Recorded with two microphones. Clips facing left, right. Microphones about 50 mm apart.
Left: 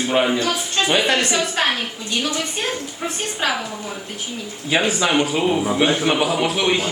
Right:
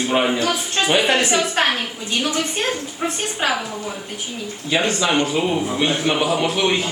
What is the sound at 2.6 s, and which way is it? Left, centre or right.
Speech, centre.